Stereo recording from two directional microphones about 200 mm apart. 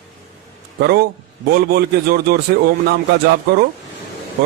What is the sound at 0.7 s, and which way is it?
A man's voice, 55° right (ahead or behind).